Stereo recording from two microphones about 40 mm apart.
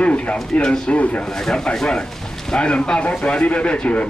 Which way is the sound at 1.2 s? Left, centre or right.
Centre.